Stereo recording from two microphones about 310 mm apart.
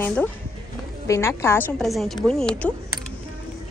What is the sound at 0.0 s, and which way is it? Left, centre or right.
A woman's voice, centre.